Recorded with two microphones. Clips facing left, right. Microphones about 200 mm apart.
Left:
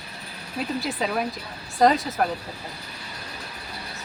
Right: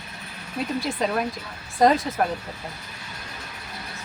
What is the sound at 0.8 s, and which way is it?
A woman's voice, centre (ahead or behind).